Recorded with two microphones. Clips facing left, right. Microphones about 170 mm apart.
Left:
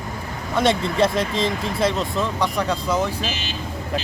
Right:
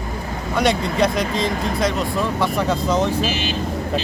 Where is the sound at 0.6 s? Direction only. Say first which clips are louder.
Even; 25° left (ahead or behind).